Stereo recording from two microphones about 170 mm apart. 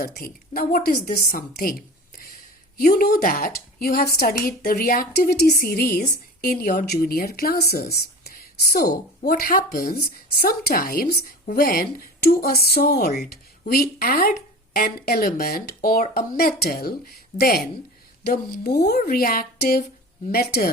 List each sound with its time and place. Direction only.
0.0 s speech: 55° left (ahead or behind)
2.7 s speech: 55° left (ahead or behind)
6.4 s speech: 50° left (ahead or behind)